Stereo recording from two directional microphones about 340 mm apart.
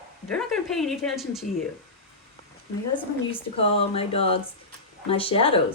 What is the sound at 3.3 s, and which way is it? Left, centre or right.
Speech, centre.